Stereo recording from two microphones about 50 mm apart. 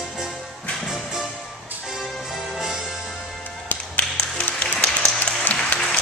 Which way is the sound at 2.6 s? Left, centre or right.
Centre.